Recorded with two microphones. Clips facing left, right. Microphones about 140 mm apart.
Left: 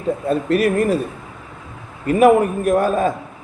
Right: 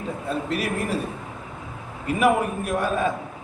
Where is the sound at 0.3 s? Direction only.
50° left (ahead or behind).